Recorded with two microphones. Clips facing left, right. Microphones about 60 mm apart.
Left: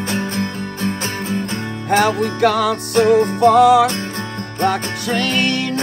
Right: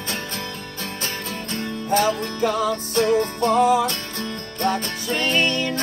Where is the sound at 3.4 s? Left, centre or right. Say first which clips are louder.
Left 7 dB; left.